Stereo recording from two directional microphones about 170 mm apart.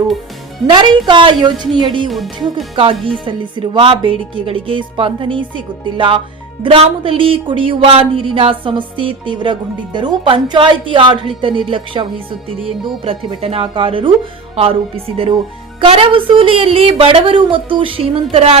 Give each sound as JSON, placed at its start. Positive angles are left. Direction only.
{"t": 0.7, "sound": "a woman's voice", "side_deg": -25}
{"t": 2.0, "sound": "speech", "side_deg": 0}
{"t": 2.7, "sound": "speech", "side_deg": -30}